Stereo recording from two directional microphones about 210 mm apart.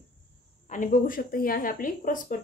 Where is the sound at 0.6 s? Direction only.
40° left (ahead or behind).